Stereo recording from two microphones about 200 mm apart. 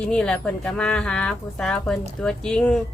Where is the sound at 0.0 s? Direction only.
5° left (ahead or behind).